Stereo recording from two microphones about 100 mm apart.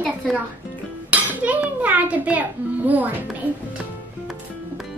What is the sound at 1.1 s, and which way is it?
Music, 15° right (ahead or behind).